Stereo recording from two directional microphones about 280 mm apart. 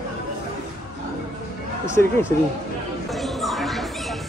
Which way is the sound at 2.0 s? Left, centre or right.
Centre.